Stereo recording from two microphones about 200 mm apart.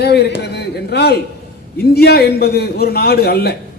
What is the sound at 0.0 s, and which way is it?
A man's voice, 55° left (ahead or behind).